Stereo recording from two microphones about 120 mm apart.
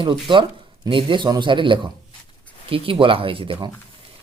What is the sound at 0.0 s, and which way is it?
Speech, 45° right (ahead or behind).